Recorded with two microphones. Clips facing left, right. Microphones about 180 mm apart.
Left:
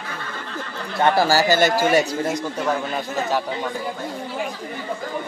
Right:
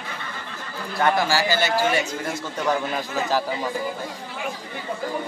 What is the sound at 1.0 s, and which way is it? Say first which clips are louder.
Speech: left 4 dB; 35° left (ahead or behind).